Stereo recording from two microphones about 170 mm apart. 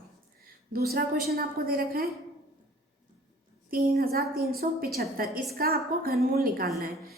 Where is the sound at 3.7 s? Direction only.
60° right (ahead or behind).